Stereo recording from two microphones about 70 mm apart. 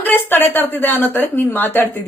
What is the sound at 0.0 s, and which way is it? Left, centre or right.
A woman's voice, left.